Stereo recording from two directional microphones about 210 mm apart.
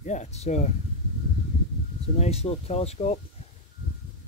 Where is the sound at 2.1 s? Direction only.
30° left (ahead or behind).